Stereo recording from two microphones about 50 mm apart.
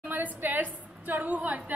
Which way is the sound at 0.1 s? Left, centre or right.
Right.